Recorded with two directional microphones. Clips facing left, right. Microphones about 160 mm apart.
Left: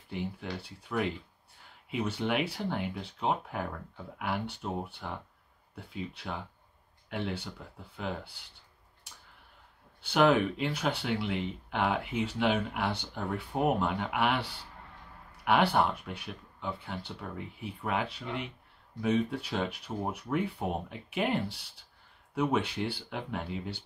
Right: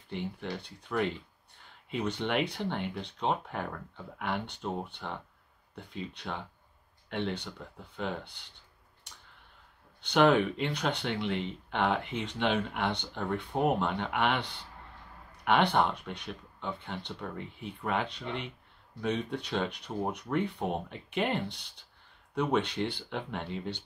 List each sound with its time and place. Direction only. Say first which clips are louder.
0.1 s speech: even; 5° left (ahead or behind)
10.0 s speech: right 1 dB; 5° left (ahead or behind)